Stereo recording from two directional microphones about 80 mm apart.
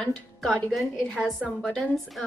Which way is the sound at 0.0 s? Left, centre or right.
Centre.